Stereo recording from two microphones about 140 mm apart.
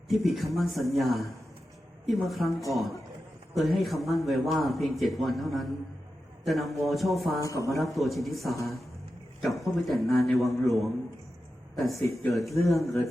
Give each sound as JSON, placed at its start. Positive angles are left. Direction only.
{"t": 0.1, "sound": "a man's voice", "side_deg": 0}
{"t": 7.4, "sound": "speech", "side_deg": 25}
{"t": 7.8, "sound": "a man's voice", "side_deg": 0}
{"t": 9.6, "sound": "a man's voice", "side_deg": 0}